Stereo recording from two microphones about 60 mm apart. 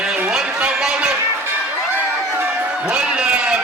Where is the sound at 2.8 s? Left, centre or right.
Centre.